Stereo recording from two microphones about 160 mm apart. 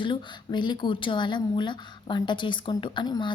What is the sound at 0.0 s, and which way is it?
A woman's voice, 30° left (ahead or behind).